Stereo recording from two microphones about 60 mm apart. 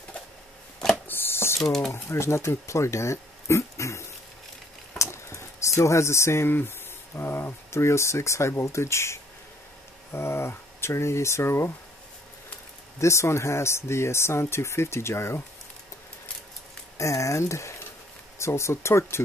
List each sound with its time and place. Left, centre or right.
1.0 s cash register: left
1.6 s speech: centre
1.9 s speech: left
4.9 s a sound: left
7.2 s speech: left
13.0 s speech: left
16.9 s speech: left